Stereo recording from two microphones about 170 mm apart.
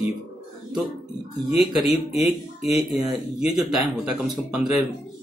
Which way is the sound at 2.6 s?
Centre (ahead or behind).